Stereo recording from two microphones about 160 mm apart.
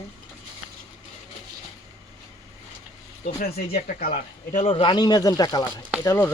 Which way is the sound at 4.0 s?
65° left (ahead or behind).